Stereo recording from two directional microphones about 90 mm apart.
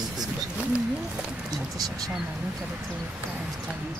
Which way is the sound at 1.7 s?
45° right (ahead or behind).